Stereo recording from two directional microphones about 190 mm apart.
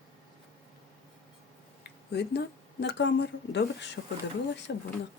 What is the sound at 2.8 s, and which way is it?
Speech, 65° left (ahead or behind).